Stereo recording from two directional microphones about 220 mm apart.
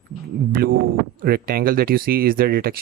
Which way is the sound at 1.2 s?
45° right (ahead or behind).